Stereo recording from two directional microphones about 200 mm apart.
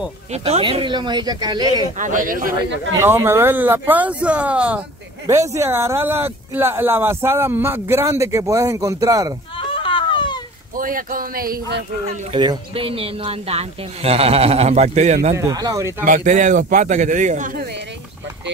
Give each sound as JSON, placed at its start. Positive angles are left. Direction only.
{"t": 0.3, "sound": "speech", "side_deg": -30}
{"t": 2.0, "sound": "speech", "side_deg": -40}
{"t": 2.6, "sound": "speech", "side_deg": -15}
{"t": 9.6, "sound": "a sound", "side_deg": 25}
{"t": 10.8, "sound": "speech", "side_deg": -45}
{"t": 12.3, "sound": "speech", "side_deg": -25}
{"t": 15.3, "sound": "speech", "side_deg": -15}
{"t": 16.0, "sound": "a man's voice", "side_deg": -40}